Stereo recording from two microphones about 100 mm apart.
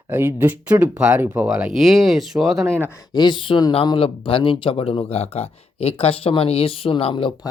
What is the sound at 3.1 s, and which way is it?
Speech, 45° left (ahead or behind).